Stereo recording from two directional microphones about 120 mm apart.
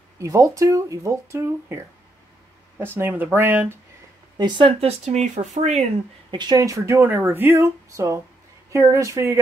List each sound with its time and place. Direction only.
0.2 s speech: 30° right (ahead or behind)
3.0 s speech: 15° right (ahead or behind)
4.4 s speech: 40° right (ahead or behind)
4.7 s speech: 60° right (ahead or behind)
6.3 s speech: 35° right (ahead or behind)